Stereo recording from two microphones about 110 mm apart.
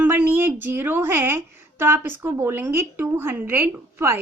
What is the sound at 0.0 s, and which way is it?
A woman's voice, 15° right (ahead or behind).